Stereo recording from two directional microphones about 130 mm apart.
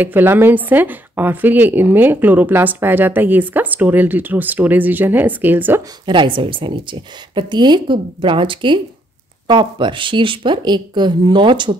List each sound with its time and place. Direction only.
0.0 s speech: 15° right (ahead or behind)
6.0 s a woman's voice: 40° right (ahead or behind)